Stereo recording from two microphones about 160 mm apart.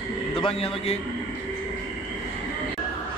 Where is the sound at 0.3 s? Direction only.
35° left (ahead or behind).